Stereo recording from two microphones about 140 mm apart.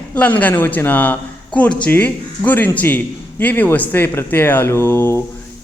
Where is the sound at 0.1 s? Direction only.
10° left (ahead or behind).